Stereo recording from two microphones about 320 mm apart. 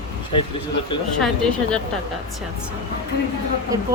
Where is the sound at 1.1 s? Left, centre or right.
Centre.